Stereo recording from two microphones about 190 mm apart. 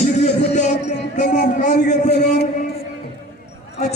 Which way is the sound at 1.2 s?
45° left (ahead or behind).